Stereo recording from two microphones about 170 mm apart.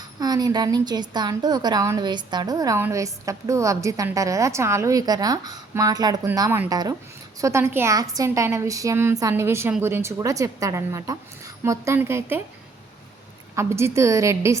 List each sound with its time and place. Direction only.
0.2 s a woman's voice: 25° right (ahead or behind)
13.6 s a woman's voice: 15° right (ahead or behind)